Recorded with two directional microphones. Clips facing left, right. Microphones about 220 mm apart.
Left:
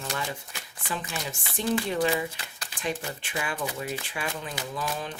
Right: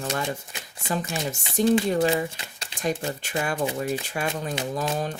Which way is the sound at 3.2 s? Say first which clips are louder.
Right 6 dB; 45° right (ahead or behind).